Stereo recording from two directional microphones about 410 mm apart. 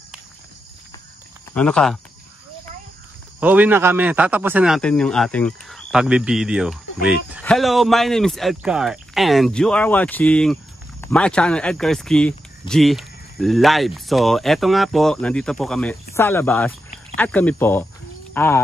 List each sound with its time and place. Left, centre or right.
1.5 s speech: centre
3.3 s speech: centre